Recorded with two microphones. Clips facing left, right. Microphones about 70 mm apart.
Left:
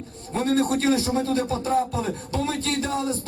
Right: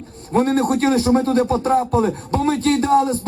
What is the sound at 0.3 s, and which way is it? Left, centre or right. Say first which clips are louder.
Speech: right 5 dB; right.